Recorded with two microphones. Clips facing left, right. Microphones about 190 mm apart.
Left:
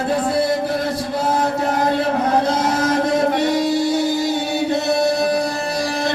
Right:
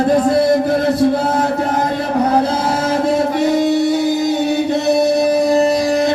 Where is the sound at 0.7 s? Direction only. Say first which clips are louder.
Right 8 dB; 55° right (ahead or behind).